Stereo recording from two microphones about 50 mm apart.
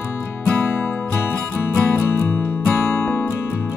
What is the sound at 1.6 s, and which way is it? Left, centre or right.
Music, left.